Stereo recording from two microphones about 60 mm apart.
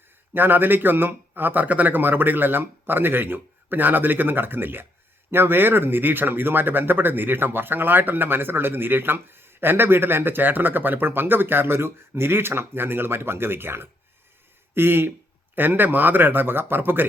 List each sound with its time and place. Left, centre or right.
0.3 s speech: right